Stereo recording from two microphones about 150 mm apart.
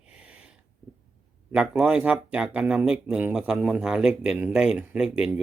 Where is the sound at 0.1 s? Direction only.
5° right (ahead or behind).